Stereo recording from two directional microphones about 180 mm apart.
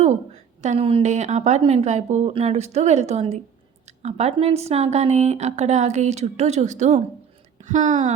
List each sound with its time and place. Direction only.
0.6 s speech: 35° right (ahead or behind)